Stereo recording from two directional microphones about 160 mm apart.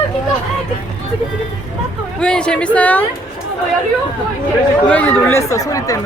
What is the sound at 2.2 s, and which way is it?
Speech, 5° left (ahead or behind).